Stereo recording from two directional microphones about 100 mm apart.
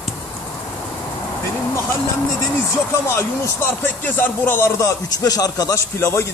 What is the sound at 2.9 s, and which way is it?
Speech, 25° left (ahead or behind).